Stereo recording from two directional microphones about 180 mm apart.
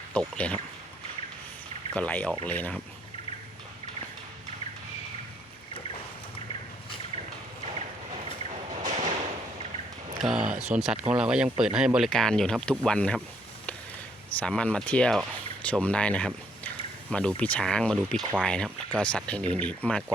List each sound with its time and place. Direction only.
0.1 s speech: 5° left (ahead or behind)
1.9 s speech: 10° left (ahead or behind)
8.4 s a sound: 40° right (ahead or behind)
10.2 s speech: centre (ahead or behind)
14.3 s speech: 5° left (ahead or behind)